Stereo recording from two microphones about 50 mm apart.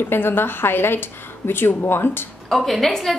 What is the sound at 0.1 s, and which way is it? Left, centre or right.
A woman's voice, left.